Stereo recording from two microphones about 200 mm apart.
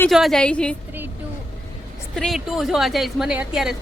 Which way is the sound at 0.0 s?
Centre (ahead or behind).